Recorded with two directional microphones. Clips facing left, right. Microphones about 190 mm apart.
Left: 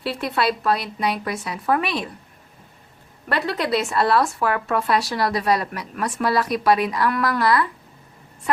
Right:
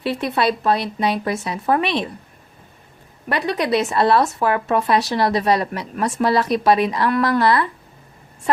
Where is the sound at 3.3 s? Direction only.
15° right (ahead or behind).